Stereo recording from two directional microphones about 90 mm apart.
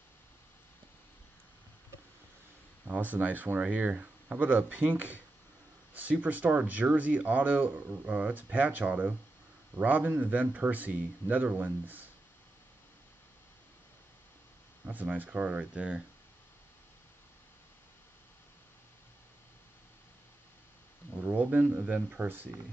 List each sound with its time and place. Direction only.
2.9 s speech: 20° right (ahead or behind)
14.9 s speech: 20° right (ahead or behind)
21.1 s speech: 10° right (ahead or behind)